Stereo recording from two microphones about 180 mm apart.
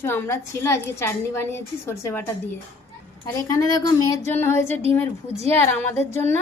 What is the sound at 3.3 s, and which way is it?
A woman's voice, 20° left (ahead or behind).